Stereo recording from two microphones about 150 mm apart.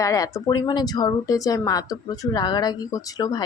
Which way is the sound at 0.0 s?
25° left (ahead or behind).